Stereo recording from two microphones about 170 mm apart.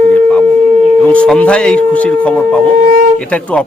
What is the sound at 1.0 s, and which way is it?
Speech, 5° left (ahead or behind).